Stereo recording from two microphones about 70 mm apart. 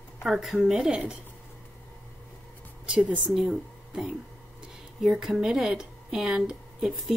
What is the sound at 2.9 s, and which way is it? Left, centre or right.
Speech, centre.